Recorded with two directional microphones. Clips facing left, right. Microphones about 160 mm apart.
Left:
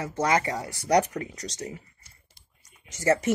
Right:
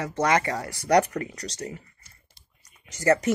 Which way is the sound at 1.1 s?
5° left (ahead or behind).